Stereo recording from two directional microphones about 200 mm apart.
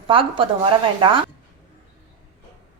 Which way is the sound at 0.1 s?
25° right (ahead or behind).